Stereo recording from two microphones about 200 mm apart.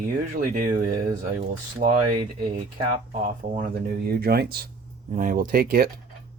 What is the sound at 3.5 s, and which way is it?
Speech, 45° right (ahead or behind).